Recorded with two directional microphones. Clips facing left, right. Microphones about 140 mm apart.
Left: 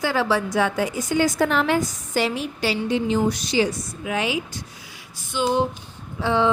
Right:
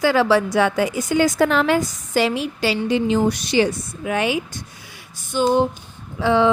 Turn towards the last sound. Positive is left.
turn(degrees=-90)